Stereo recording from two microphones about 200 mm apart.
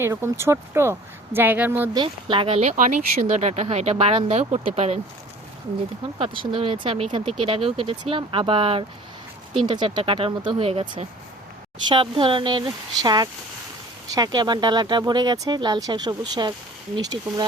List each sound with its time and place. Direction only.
0.0 s speech: 10° right (ahead or behind)
2.0 s speech: 25° right (ahead or behind)
6.1 s speech: 25° right (ahead or behind)